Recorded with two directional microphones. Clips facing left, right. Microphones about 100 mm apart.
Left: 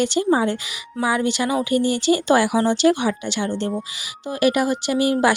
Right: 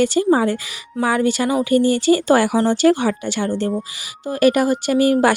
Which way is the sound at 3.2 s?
45° right (ahead or behind).